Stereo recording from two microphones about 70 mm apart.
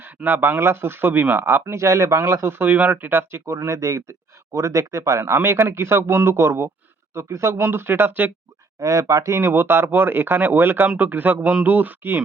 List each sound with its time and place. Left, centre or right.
0.3 s speech: right
2.5 s speech: right
7.6 s speech: right
8.8 s a man's voice: right